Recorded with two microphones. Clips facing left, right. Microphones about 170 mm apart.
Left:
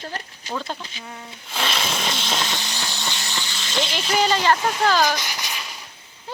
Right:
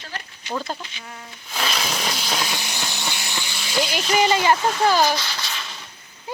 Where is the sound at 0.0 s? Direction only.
40° left (ahead or behind).